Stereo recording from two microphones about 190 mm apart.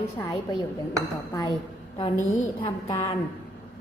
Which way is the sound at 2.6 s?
20° left (ahead or behind).